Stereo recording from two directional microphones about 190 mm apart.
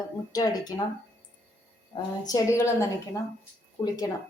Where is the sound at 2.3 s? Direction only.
15° left (ahead or behind).